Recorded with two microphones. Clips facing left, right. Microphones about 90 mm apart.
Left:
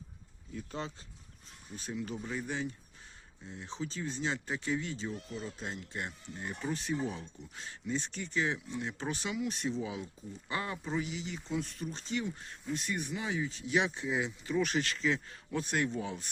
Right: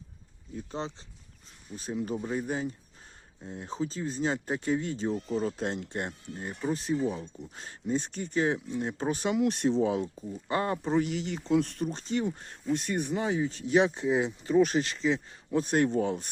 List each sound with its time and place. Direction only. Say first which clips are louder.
0.5 s speech: right 4 dB; 30° right (ahead or behind); by 6.1 s 55° right (ahead or behind)
6.3 s speech: right 5 dB; 35° right (ahead or behind)
9.3 s speech: right 11 dB; 65° right (ahead or behind)
10.5 s speech: right 8 dB; 40° right (ahead or behind); by 15.6 s 25° right (ahead or behind)
15.6 s speech: right 8 dB; 40° right (ahead or behind)